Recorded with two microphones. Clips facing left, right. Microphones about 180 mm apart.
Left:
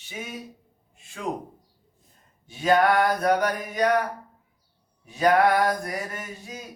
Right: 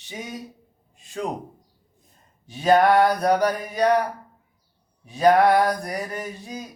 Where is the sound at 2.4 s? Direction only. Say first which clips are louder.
Right 3 dB; 40° right (ahead or behind).